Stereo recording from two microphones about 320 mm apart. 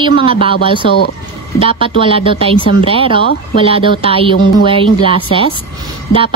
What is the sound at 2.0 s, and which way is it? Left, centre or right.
A woman's voice, centre.